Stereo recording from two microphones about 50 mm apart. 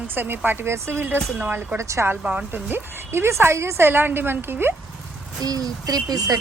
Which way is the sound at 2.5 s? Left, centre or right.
Right.